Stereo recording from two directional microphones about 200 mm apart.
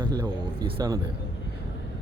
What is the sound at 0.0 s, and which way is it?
Speech, 20° right (ahead or behind).